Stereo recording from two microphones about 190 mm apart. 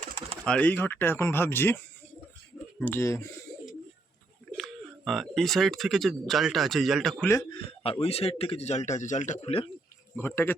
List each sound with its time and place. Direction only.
0.4 s speech: 5° left (ahead or behind)
3.5 s bird: 20° left (ahead or behind)
4.5 s speech: centre (ahead or behind)
7.3 s a man's voice: 20° left (ahead or behind)
7.9 s a man's voice: 30° left (ahead or behind)
10.2 s speech: 10° left (ahead or behind)